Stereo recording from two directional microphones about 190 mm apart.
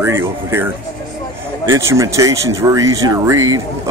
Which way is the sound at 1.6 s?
15° right (ahead or behind).